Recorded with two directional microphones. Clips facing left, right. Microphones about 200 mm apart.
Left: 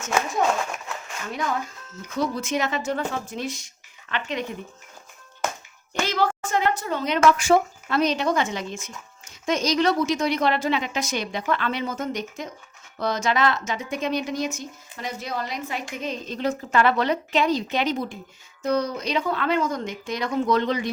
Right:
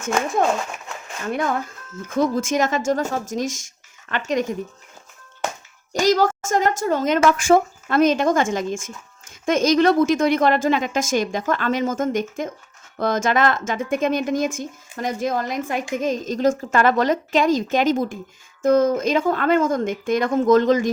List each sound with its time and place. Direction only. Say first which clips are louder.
2.0 s speech: right 6 dB; 50° right (ahead or behind)
5.9 s speech: right 6 dB; 40° right (ahead or behind)